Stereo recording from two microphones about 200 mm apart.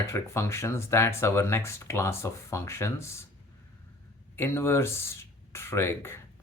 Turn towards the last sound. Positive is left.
turn(degrees=10)  # may be behind; listen again after turning